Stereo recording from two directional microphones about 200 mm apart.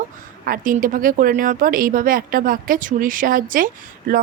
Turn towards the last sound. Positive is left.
turn(degrees=-45)  # may be behind; listen again after turning